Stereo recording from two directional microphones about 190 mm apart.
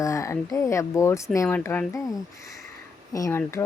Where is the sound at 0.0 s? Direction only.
15° left (ahead or behind).